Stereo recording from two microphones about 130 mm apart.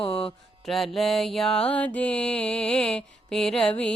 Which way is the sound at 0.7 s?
Centre (ahead or behind).